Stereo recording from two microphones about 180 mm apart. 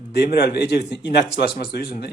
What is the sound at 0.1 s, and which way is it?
Speech, 65° left (ahead or behind).